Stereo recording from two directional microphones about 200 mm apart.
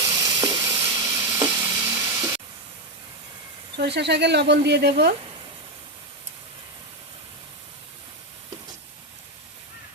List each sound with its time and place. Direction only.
0.0 s sizzle: 20° right (ahead or behind)
0.9 s stir: 15° right (ahead or behind)
3.8 s speech: 60° right (ahead or behind)